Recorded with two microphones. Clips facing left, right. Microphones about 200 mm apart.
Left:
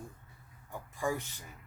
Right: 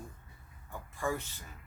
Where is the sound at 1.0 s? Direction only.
15° left (ahead or behind).